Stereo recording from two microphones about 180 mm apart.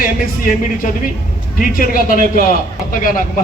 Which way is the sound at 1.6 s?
50° left (ahead or behind).